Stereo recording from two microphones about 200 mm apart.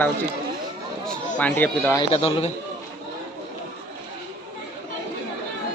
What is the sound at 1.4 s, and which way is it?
Speech, 10° left (ahead or behind).